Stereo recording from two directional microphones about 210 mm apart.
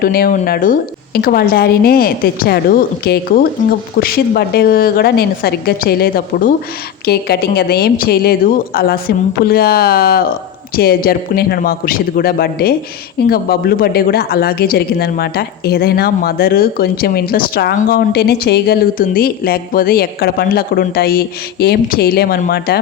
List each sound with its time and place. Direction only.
0.0 s speech: 45° left (ahead or behind)